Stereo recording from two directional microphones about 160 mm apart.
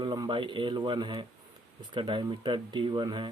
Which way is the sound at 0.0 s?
30° right (ahead or behind).